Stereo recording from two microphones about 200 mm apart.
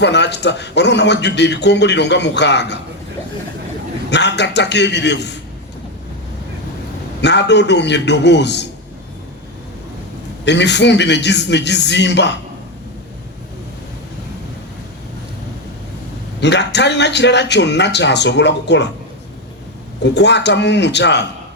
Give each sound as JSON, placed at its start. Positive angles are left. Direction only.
{"t": 0.0, "sound": "a man's voice", "side_deg": 60}
{"t": 4.1, "sound": "a man's voice", "side_deg": 60}
{"t": 7.2, "sound": "a man's voice", "side_deg": 60}
{"t": 10.4, "sound": "a man's voice", "side_deg": 60}
{"t": 16.4, "sound": "a man's voice", "side_deg": 60}
{"t": 20.0, "sound": "a man's voice", "side_deg": 60}